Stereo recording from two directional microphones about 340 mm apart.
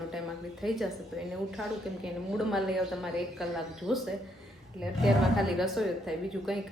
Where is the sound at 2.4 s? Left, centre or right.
Centre.